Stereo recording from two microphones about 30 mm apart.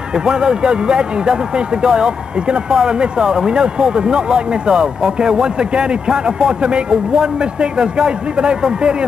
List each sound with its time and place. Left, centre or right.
0.2 s speech: right